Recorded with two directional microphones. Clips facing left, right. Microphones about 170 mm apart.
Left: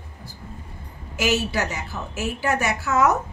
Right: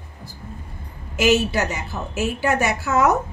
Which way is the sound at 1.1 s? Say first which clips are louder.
Right 5 dB; 20° right (ahead or behind).